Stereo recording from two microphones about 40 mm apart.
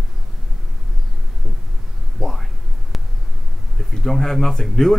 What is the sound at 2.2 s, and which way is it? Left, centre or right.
Speech, centre.